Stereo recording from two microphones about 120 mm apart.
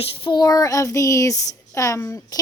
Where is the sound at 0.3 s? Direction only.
30° left (ahead or behind).